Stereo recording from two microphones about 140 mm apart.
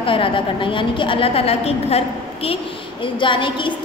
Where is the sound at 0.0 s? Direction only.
40° left (ahead or behind).